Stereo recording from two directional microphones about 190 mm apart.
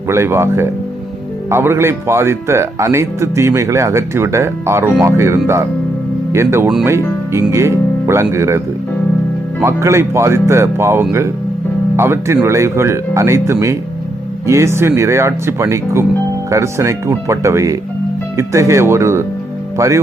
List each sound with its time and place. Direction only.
0.1 s speech: 15° right (ahead or behind)